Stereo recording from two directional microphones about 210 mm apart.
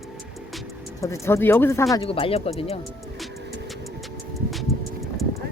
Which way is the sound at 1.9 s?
25° left (ahead or behind).